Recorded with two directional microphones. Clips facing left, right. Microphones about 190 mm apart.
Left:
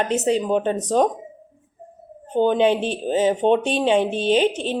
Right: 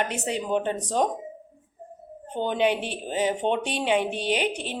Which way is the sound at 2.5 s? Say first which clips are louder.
Left 2 dB; 25° left (ahead or behind).